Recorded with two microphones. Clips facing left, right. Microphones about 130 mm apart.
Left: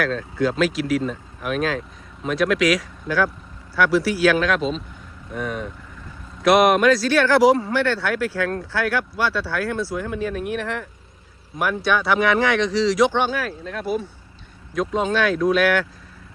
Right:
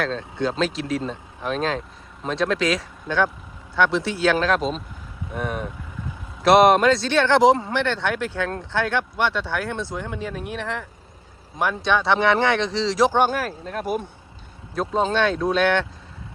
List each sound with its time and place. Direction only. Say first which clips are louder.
0.0 s speech: left 3 dB; 25° right (ahead or behind)
5.3 s speech: even; centre (ahead or behind)
6.4 s speech: right 1 dB; 30° right (ahead or behind); by 14.1 s 50° right (ahead or behind)
14.8 s speech: even; 30° right (ahead or behind)